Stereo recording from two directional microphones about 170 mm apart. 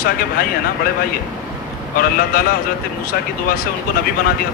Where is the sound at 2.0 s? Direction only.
60° left (ahead or behind).